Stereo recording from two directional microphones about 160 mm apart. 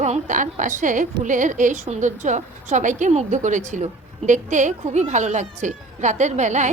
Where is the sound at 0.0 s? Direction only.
50° right (ahead or behind).